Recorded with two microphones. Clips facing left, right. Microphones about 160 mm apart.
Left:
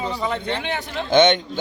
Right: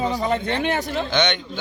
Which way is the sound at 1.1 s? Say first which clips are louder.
Left 11 dB; 50° left (ahead or behind).